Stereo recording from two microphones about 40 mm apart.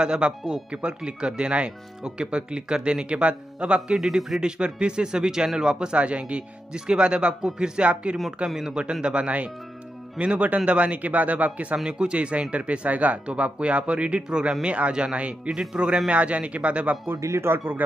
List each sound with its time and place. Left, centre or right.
0.0 s speech: right
3.9 s a man's voice: centre
5.9 s speech: right
8.5 s a man's voice: centre
9.0 s speech: right
11.8 s speech: right
15.7 s speech: right
16.1 s speech: right
17.1 s speech: right